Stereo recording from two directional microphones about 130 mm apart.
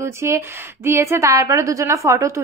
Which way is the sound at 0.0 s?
20° right (ahead or behind).